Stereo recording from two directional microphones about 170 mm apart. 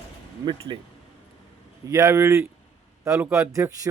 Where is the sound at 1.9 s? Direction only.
15° right (ahead or behind).